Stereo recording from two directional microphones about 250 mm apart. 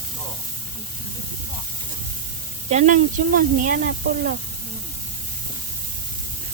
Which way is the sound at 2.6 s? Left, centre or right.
Right.